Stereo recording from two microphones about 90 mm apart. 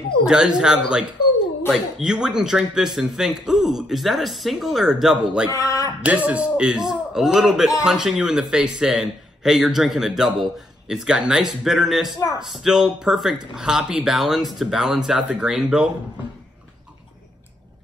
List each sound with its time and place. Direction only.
0.3 s a man's voice: 10° right (ahead or behind)
5.5 s a sound: 40° left (ahead or behind)
6.0 s a man's voice: 15° right (ahead or behind)